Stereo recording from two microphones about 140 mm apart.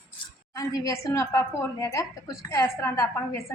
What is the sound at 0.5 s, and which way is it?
A woman's voice, 25° left (ahead or behind).